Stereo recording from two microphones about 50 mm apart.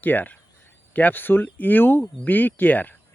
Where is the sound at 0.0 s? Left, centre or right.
Left.